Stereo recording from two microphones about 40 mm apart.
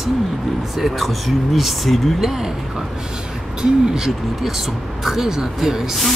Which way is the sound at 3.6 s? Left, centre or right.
Centre.